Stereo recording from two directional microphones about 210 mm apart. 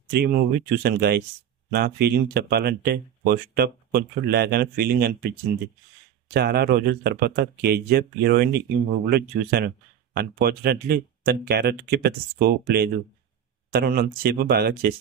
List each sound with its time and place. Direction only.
0.1 s speech: 50° right (ahead or behind)
6.3 s speech: 50° right (ahead or behind)